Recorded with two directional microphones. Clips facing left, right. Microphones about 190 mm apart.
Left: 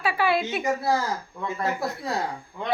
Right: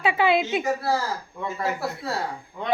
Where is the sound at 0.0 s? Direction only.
20° right (ahead or behind).